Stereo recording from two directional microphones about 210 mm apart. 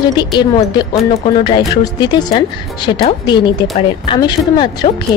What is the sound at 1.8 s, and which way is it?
Speech, 20° left (ahead or behind).